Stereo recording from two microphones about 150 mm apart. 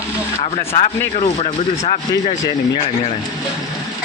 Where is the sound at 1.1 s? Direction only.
45° left (ahead or behind).